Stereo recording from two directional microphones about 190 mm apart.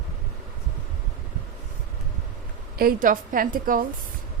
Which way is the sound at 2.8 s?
50° right (ahead or behind).